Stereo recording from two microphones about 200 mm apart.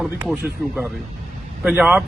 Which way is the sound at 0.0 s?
5° right (ahead or behind).